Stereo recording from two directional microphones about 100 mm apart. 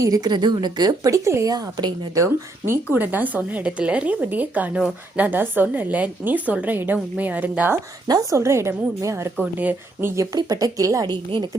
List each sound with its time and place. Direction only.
0.0 s a woman's voice: 40° right (ahead or behind)
1.5 s a woman's voice: 40° right (ahead or behind)
2.9 s a woman's voice: 20° right (ahead or behind)
8.0 s a woman's voice: 40° right (ahead or behind)
8.4 s a woman's voice: 25° right (ahead or behind)
9.4 s a woman's voice: 15° right (ahead or behind)
10.2 s a woman's voice: 35° right (ahead or behind)